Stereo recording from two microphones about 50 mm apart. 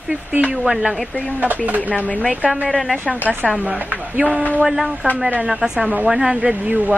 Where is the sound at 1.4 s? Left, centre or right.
Right.